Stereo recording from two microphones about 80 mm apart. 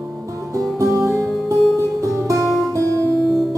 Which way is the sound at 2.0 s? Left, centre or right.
Right.